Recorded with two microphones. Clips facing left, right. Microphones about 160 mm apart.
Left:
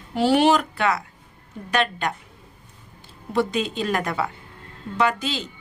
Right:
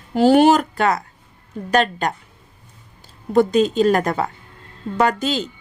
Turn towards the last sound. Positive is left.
turn(degrees=-45)  # may be behind; listen again after turning